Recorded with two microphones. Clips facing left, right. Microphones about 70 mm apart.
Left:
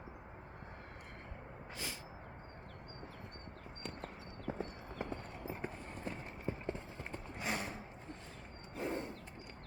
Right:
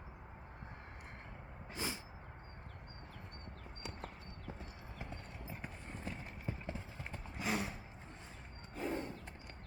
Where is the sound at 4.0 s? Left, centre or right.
Left.